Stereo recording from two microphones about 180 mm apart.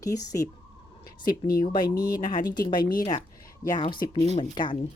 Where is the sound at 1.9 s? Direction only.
50° left (ahead or behind).